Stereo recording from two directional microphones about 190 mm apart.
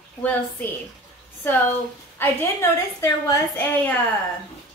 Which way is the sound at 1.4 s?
10° left (ahead or behind).